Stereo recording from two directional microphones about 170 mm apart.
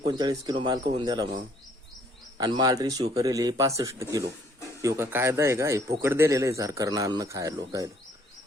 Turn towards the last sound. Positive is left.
turn(degrees=-20)  # may be behind; listen again after turning